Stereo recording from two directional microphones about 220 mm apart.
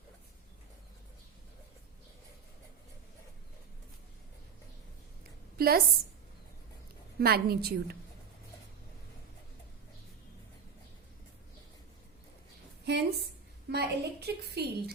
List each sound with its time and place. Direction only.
5.5 s a woman's voice: 45° right (ahead or behind)
7.2 s a woman's voice: 45° right (ahead or behind)
12.8 s a sound: 50° right (ahead or behind)
13.7 s a woman's voice: 50° right (ahead or behind)